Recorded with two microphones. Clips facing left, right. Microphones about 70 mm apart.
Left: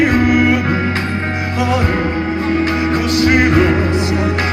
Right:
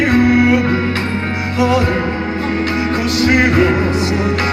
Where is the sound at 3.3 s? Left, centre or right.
Left.